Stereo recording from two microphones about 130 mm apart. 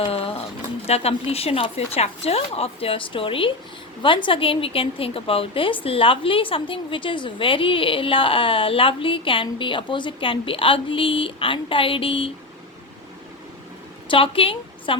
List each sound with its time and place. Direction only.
0.0 s a sound: 45° left (ahead or behind)
0.9 s a woman's voice: 50° left (ahead or behind)
14.1 s a woman's voice: 45° left (ahead or behind)